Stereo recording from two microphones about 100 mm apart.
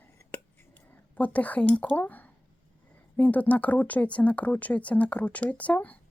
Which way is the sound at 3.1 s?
15° left (ahead or behind).